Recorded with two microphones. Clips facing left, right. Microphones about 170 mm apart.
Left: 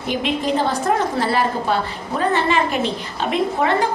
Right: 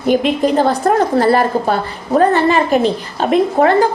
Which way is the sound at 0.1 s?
45° right (ahead or behind).